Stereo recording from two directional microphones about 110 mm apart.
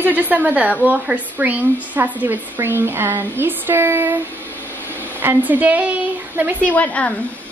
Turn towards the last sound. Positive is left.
turn(degrees=10)  # may be behind; listen again after turning